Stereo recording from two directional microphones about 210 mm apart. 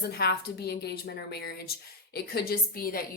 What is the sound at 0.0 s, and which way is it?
A woman's voice, 50° left (ahead or behind).